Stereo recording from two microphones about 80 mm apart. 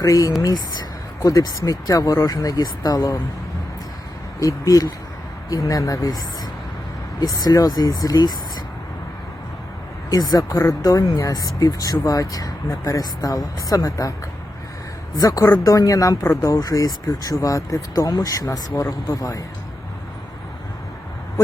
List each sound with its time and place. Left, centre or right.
0.0 s speech: left
4.4 s speech: left
10.1 s speech: left
15.1 s speech: left